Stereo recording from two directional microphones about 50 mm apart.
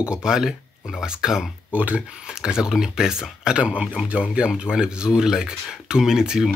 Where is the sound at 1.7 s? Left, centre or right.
Right.